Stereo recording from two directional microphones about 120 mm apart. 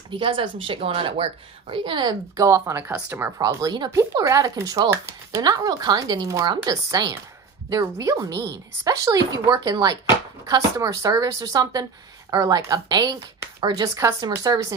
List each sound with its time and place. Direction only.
0.1 s speech: 45° right (ahead or behind); by 3.3 s 20° right (ahead or behind)
3.3 s a woman's voice: 30° right (ahead or behind)